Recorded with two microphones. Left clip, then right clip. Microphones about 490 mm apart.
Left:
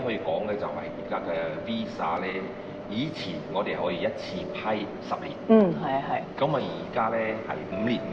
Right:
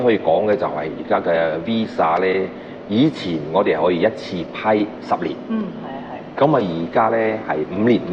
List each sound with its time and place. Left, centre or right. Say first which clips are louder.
0.1 s speech: right 12 dB; right
6.4 s speech: right 14 dB; right